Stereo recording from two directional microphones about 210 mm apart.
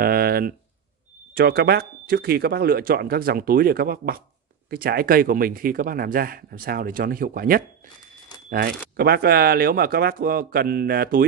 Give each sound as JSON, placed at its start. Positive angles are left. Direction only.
{"t": 0.0, "sound": "speech", "side_deg": -45}
{"t": 8.9, "sound": "speech", "side_deg": -50}